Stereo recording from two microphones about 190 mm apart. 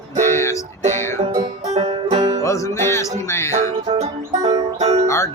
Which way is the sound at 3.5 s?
35° right (ahead or behind).